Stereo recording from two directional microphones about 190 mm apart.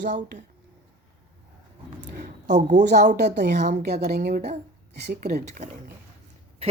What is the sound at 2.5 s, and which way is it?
Speech, 40° right (ahead or behind).